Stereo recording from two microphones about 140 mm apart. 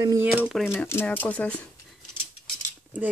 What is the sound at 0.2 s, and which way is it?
Speech, 15° right (ahead or behind).